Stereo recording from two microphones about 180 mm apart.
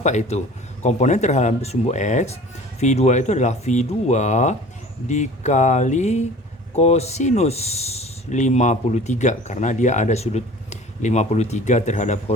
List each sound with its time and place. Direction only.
0.0 s speech: 40° left (ahead or behind)